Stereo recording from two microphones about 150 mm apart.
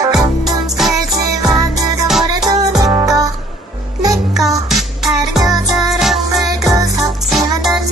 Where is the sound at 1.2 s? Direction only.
25° right (ahead or behind).